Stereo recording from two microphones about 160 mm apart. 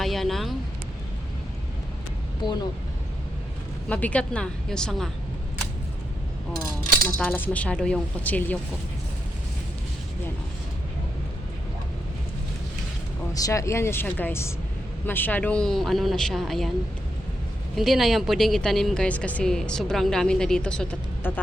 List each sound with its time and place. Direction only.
0.0 s vehicle: centre (ahead or behind)
2.4 s speech: 25° left (ahead or behind)
3.8 s speech: 10° left (ahead or behind)
7.2 s speech: 10° left (ahead or behind)
13.3 s a woman's voice: 20° left (ahead or behind); by 16.7 s centre (ahead or behind)
17.7 s a woman's voice: centre (ahead or behind)